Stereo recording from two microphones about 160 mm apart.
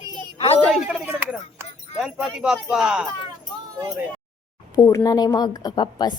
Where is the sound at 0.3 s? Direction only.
40° left (ahead or behind).